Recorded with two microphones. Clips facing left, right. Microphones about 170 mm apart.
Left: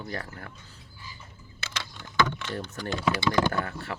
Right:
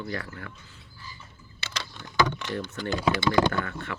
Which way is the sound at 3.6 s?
35° left (ahead or behind).